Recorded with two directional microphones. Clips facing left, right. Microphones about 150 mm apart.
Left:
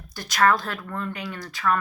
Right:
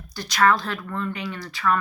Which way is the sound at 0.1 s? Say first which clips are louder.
Right 1 dB; 50° left (ahead or behind).